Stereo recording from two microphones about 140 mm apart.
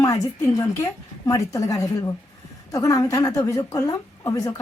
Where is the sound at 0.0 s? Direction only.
25° left (ahead or behind).